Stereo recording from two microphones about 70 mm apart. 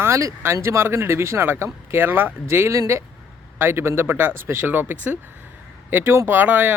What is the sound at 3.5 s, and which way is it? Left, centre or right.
Speech, right.